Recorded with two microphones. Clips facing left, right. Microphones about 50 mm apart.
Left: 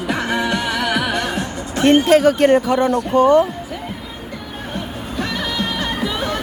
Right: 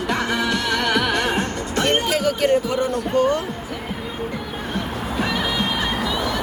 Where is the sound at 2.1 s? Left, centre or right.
Left.